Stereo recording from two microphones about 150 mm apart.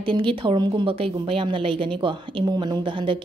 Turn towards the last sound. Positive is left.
turn(degrees=-35)  # may be behind; listen again after turning